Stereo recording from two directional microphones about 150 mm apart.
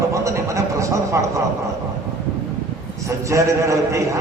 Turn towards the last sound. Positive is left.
turn(degrees=-20)  # may be behind; listen again after turning